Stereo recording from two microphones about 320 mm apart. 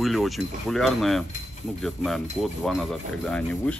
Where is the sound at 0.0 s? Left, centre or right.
Centre.